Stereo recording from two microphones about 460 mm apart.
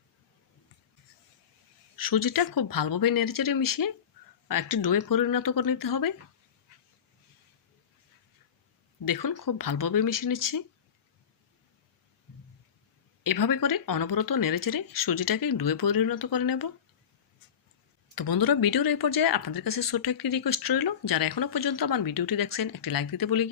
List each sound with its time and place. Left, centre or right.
2.0 s speech: left
9.0 s speech: left
13.2 s speech: left
18.1 s speech: left